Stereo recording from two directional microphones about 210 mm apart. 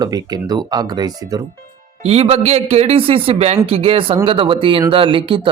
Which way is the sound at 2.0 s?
30° right (ahead or behind).